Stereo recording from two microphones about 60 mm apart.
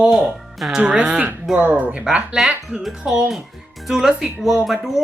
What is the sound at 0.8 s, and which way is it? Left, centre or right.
Speech, centre.